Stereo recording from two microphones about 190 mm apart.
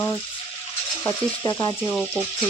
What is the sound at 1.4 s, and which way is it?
Frying, 20° left (ahead or behind).